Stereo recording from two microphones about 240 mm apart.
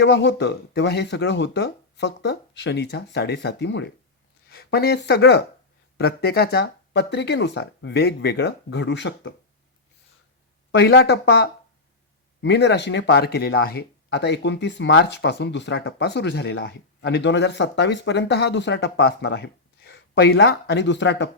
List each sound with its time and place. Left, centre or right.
0.0 s speech: left
10.7 s speech: left